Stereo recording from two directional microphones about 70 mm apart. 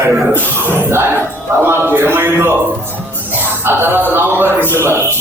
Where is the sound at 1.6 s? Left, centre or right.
Right.